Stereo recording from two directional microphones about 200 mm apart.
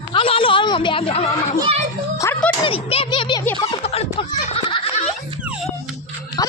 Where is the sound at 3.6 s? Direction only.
30° left (ahead or behind).